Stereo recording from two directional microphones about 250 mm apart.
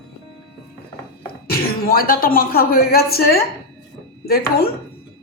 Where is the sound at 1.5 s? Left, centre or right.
Left.